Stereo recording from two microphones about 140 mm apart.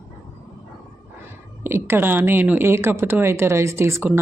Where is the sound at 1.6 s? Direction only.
15° right (ahead or behind).